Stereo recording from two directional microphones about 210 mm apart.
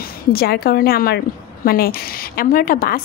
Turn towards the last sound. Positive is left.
turn(degrees=45)  # may be behind; listen again after turning